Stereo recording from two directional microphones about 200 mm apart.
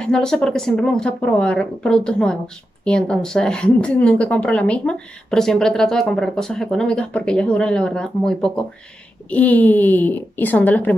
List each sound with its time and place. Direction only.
0.0 s speech: 5° left (ahead or behind)